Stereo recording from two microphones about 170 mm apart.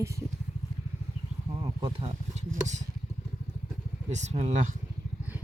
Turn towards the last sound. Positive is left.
turn(degrees=-40)  # may be behind; listen again after turning